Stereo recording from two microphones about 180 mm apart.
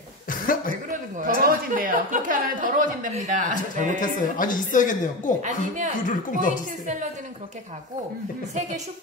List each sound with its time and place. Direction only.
0.5 s a sound: 50° left (ahead or behind)
0.8 s a woman's voice: 45° right (ahead or behind)
4.0 s a woman's voice: 45° left (ahead or behind)
5.4 s a woman's voice: 45° right (ahead or behind)
6.0 s a woman's voice: 45° left (ahead or behind)